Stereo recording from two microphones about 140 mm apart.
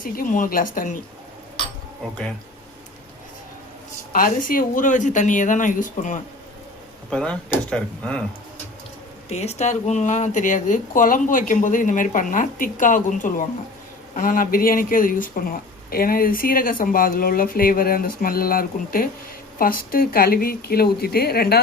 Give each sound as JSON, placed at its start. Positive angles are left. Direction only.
{"t": 0.0, "sound": "speech", "side_deg": 75}
{"t": 4.1, "sound": "speech", "side_deg": 90}
{"t": 7.1, "sound": "speech", "side_deg": 5}
{"t": 9.3, "sound": "speech", "side_deg": 50}